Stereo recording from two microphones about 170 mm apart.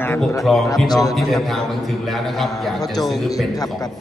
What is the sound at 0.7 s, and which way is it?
Speech, 20° left (ahead or behind).